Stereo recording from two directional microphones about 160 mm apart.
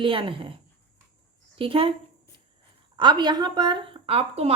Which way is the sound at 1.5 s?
35° right (ahead or behind).